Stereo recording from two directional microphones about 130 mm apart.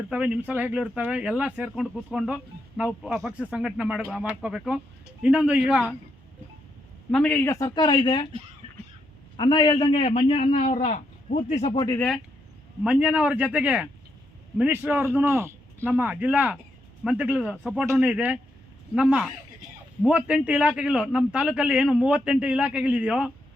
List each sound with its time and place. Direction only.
0.1 s speech: 10° right (ahead or behind)
7.1 s a man's voice: 10° left (ahead or behind)
7.5 s speech: 30° left (ahead or behind)
9.4 s a man's voice: 35° left (ahead or behind); by 10.6 s 50° left (ahead or behind)
11.3 s a man's voice: 65° left (ahead or behind)
12.8 s a man's voice: 10° right (ahead or behind)